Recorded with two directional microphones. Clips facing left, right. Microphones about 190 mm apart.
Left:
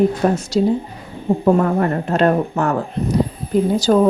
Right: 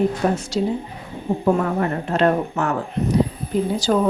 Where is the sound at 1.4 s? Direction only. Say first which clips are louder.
Left 4 dB; 45° left (ahead or behind).